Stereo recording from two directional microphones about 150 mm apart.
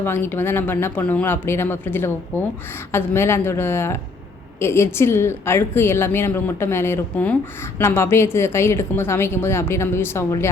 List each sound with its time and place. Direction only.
0.0 s a woman's voice: 15° left (ahead or behind)